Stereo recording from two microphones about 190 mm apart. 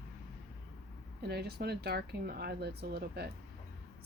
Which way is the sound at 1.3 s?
55° right (ahead or behind).